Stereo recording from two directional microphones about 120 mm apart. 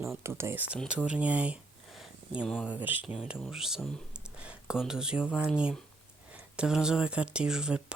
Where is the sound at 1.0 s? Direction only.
10° right (ahead or behind).